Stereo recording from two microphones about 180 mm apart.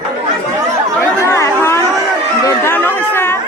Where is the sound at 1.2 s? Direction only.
15° left (ahead or behind).